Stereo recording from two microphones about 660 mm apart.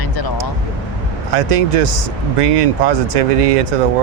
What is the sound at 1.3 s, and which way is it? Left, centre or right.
Speech, right.